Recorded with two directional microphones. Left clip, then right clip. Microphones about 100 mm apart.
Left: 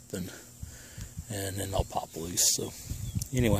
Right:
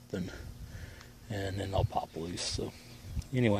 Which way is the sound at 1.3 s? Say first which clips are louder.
Left 1 dB; 35° left (ahead or behind).